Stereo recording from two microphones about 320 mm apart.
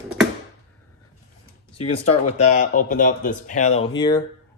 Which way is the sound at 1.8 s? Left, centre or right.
Left.